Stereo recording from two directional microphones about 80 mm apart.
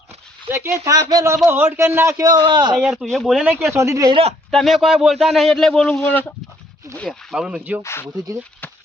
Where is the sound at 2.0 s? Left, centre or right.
Right.